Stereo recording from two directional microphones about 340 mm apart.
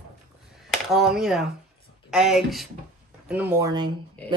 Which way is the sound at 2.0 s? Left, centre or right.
Centre.